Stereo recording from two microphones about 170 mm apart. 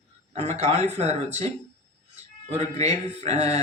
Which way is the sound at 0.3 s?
40° right (ahead or behind).